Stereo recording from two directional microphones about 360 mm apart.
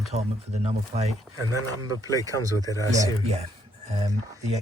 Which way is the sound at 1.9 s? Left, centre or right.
Centre.